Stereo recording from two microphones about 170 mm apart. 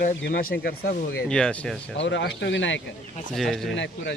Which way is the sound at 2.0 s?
90° left.